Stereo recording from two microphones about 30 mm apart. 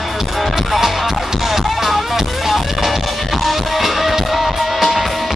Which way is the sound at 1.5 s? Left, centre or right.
Centre.